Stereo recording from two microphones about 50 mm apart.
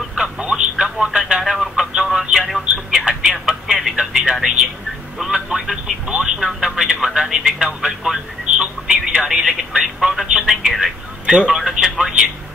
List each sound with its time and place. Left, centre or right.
0.1 s telephone: centre
1.0 s speech: centre
1.4 s a sound: centre
2.6 s telephone: centre
3.1 s a sound: centre
5.2 s telephone: centre
6.4 s radio: centre
8.5 s telephone: centre